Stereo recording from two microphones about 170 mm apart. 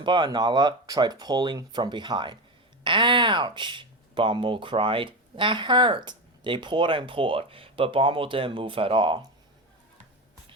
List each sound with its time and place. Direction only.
0.0 s speech: 25° right (ahead or behind)